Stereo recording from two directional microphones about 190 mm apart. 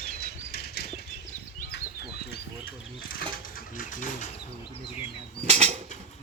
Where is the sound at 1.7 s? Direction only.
55° left (ahead or behind).